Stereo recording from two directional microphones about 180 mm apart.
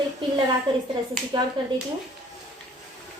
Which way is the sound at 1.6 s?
25° right (ahead or behind).